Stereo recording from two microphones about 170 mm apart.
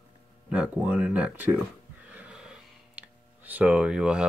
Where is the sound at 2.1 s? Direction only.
5° right (ahead or behind).